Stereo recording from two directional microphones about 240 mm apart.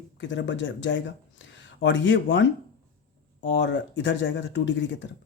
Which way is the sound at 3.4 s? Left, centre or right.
Left.